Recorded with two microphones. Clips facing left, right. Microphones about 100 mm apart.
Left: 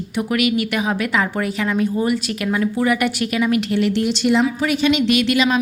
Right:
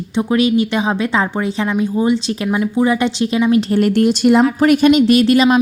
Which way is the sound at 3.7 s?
50° right (ahead or behind).